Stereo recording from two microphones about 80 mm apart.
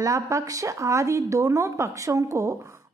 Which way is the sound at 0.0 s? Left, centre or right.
Right.